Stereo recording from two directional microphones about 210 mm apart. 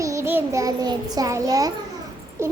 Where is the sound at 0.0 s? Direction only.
15° right (ahead or behind).